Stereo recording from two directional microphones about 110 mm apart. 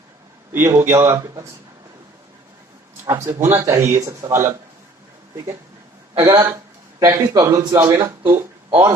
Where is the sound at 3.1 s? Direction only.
25° right (ahead or behind).